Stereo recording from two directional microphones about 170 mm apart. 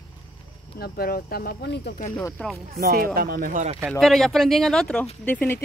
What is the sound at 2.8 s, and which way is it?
Speech, 65° right (ahead or behind).